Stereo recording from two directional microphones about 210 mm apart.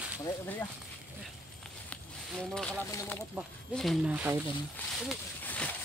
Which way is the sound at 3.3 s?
5° right (ahead or behind).